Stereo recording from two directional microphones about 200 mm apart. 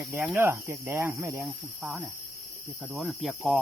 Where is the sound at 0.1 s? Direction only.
10° right (ahead or behind).